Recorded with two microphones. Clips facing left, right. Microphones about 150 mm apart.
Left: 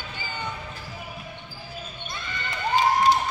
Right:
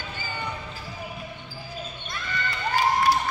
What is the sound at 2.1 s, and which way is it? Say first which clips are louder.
Clip-clop: right 3 dB; 20° left (ahead or behind).